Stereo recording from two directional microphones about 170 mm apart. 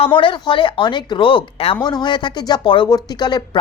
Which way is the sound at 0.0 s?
30° left (ahead or behind).